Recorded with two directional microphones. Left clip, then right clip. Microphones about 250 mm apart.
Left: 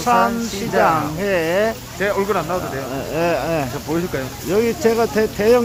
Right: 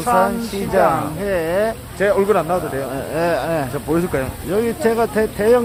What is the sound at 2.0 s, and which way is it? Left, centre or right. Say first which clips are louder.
Speech: right 4 dB; right.